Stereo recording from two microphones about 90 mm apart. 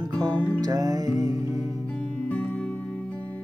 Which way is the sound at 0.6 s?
40° right (ahead or behind).